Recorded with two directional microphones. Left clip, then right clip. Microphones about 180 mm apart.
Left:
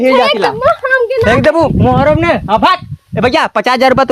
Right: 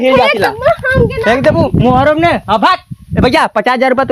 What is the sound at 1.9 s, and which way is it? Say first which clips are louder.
Speech: right 1 dB; 5° right (ahead or behind).